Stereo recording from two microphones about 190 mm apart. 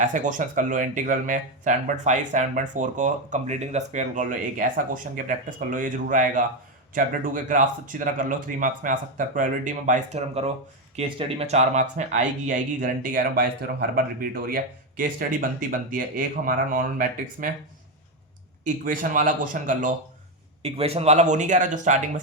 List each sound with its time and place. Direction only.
0.0 s speech: 40° right (ahead or behind)
18.6 s speech: 45° right (ahead or behind)
20.6 s speech: 30° right (ahead or behind)